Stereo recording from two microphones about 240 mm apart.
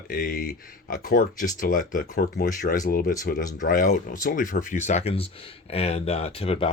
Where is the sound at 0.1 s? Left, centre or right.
Left.